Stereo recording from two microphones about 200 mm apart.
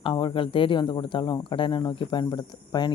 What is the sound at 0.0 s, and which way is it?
Speech, 25° left (ahead or behind).